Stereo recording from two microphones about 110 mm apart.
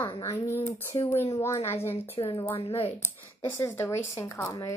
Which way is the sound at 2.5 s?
65° left (ahead or behind).